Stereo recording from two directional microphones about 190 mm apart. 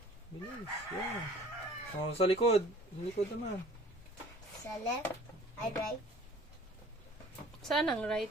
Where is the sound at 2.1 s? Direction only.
30° left (ahead or behind).